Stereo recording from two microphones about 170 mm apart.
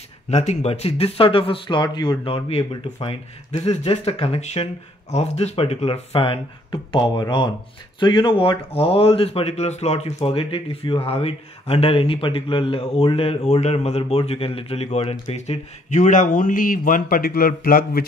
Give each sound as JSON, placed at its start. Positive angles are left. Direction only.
{"t": 0.3, "sound": "speech", "side_deg": 40}